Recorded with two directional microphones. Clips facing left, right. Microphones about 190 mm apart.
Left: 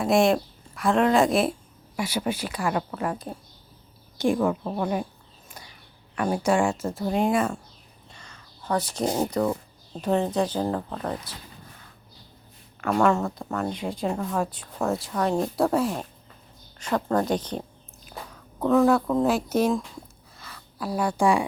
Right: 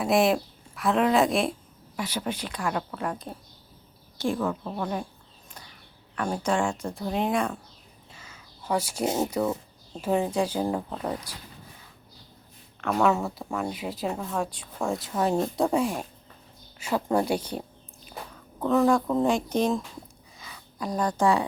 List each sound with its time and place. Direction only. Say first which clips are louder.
0.0 s a woman's voice: left 2 dB; centre (ahead or behind)
4.2 s a woman's voice: left 4 dB; 15° left (ahead or behind)
6.1 s speech: left 4 dB; 10° left (ahead or behind)
8.1 s speech: even; 5° right (ahead or behind)
12.8 s speech: left 2 dB; 5° right (ahead or behind)
16.8 s speech: left 1 dB; 10° right (ahead or behind)
17.6 s a sound: left 1 dB; centre (ahead or behind)
18.6 s a woman's voice: left 2 dB; 5° left (ahead or behind)